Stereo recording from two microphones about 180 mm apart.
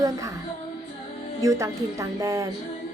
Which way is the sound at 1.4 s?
15° right (ahead or behind).